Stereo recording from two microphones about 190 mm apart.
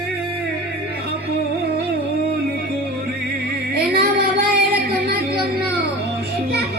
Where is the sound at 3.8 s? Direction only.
55° right (ahead or behind).